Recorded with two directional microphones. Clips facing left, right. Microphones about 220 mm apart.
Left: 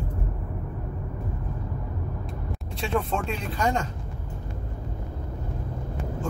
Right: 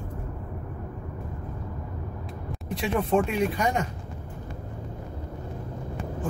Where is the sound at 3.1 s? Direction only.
15° right (ahead or behind).